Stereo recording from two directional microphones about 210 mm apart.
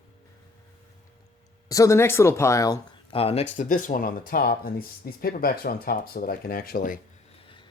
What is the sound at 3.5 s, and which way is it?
Speech, 40° left (ahead or behind).